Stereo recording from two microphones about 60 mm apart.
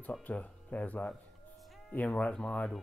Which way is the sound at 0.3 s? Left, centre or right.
Left.